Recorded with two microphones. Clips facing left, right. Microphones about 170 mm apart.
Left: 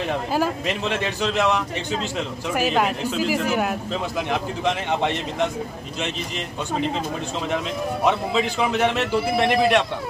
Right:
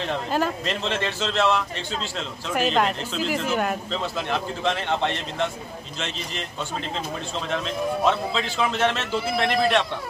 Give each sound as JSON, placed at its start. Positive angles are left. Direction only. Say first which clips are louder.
{"t": 0.0, "sound": "speech", "louder": "left 2 dB", "side_deg": 10}
{"t": 7.4, "sound": "speech", "louder": "even", "side_deg": 15}